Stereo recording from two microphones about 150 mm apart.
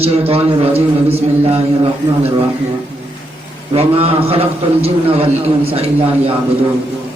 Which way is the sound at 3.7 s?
40° right (ahead or behind).